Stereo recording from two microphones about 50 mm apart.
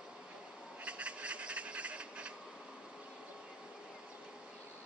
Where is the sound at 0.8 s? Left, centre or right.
Right.